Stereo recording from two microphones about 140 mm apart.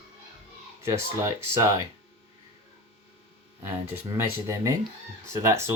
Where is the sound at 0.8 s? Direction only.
20° right (ahead or behind).